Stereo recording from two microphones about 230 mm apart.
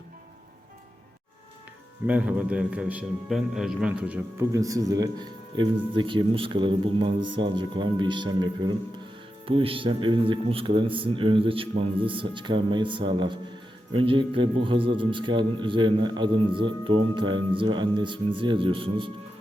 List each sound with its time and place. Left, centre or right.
2.0 s a man's voice: centre; by 19.1 s right